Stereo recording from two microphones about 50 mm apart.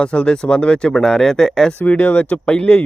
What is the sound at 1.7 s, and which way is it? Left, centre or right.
Speech, left.